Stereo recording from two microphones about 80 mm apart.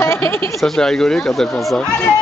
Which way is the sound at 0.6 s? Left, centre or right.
Centre.